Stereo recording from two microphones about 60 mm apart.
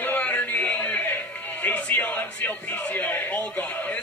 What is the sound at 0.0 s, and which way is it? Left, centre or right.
Music, left.